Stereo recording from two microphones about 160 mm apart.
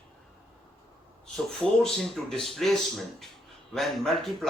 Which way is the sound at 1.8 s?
Centre (ahead or behind).